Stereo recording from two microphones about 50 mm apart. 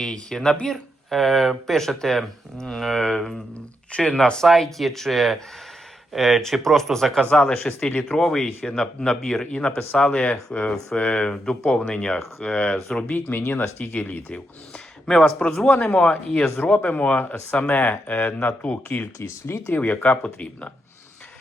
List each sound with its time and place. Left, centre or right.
0.0 s speech: centre
10.5 s speech: left
10.9 s speech: centre
13.1 s speech: left
15.0 s speech: centre
15.6 s speech: left
19.5 s speech: left
19.7 s speech: left